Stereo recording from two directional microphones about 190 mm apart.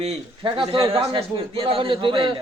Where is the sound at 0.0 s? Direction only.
30° right (ahead or behind).